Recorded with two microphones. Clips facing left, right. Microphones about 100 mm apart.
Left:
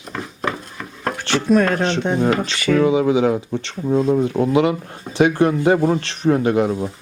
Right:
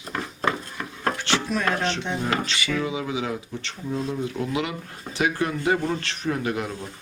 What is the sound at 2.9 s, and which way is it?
A man's voice, 35° left (ahead or behind).